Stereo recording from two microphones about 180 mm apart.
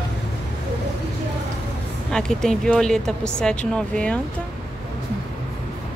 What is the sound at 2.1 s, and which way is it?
Speech, 5° left (ahead or behind).